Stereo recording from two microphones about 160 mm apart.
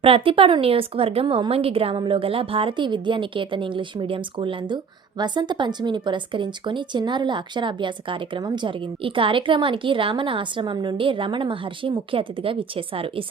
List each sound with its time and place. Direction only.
0.0 s a woman's voice: 35° right (ahead or behind)